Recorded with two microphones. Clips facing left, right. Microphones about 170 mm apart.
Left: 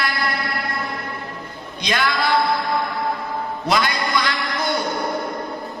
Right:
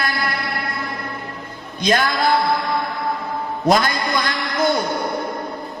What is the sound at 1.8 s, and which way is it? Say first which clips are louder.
Speech: right 4 dB; 45° right (ahead or behind).